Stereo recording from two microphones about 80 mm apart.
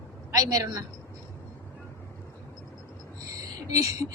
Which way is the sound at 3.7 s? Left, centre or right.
Right.